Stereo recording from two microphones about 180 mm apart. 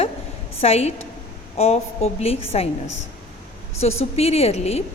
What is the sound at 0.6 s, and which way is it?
A woman's voice, 35° left (ahead or behind).